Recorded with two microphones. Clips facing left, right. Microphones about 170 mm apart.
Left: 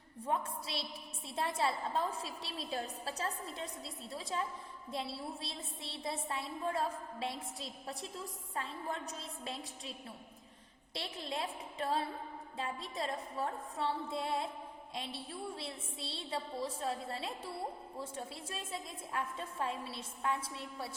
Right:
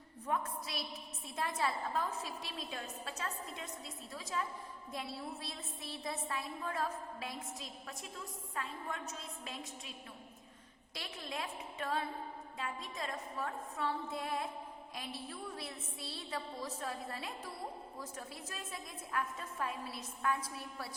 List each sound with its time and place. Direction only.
0.3 s a woman's voice: 30° left (ahead or behind)
10.9 s a woman's voice: 30° left (ahead or behind)